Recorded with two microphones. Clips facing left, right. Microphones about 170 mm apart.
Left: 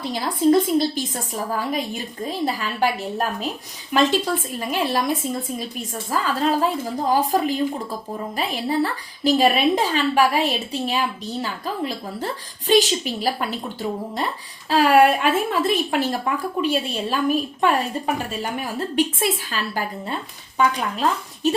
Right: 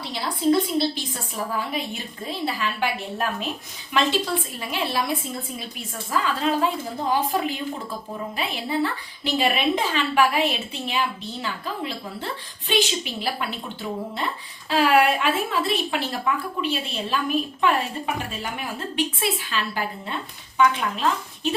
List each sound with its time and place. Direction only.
0.0 s a woman's voice: 45° left (ahead or behind)
14.7 s a woman's voice: 45° left (ahead or behind)